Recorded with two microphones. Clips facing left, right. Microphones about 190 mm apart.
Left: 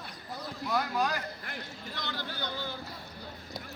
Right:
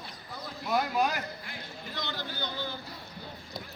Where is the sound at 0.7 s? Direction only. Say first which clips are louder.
Right 3 dB; 15° right (ahead or behind).